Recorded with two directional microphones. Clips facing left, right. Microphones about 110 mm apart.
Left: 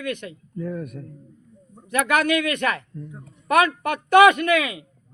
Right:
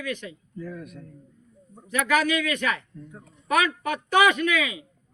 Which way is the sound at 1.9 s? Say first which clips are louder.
Left 3 dB; 60° left (ahead or behind).